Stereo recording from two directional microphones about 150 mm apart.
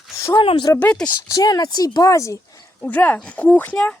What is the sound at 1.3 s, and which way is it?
Speech, 25° left (ahead or behind).